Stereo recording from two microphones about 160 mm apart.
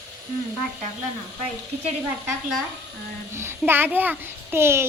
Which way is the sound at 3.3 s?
15° right (ahead or behind).